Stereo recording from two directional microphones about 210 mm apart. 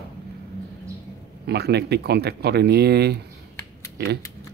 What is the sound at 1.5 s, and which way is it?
Speech, 50° right (ahead or behind).